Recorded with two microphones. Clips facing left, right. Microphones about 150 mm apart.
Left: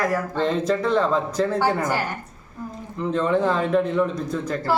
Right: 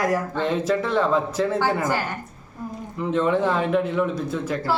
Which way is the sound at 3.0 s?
5° right (ahead or behind).